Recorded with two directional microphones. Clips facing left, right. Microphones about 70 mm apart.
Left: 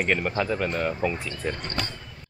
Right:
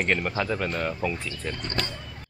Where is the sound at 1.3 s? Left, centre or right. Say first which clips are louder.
Left 2 dB; left.